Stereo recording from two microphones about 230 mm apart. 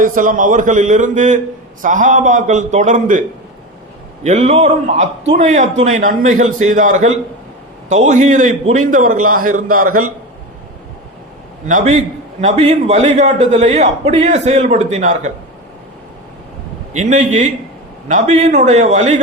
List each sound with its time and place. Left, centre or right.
0.0 s a man's voice: right
11.7 s a man's voice: right
16.9 s a man's voice: right